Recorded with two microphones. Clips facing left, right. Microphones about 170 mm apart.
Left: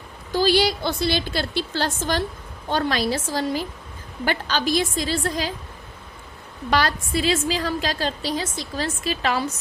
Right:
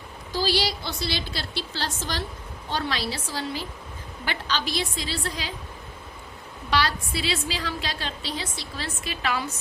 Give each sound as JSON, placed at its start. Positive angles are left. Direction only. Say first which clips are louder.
{"t": 0.3, "sound": "a woman's voice", "louder": "left 6 dB", "side_deg": 55}
{"t": 6.7, "sound": "a woman's voice", "louder": "left 3 dB", "side_deg": 45}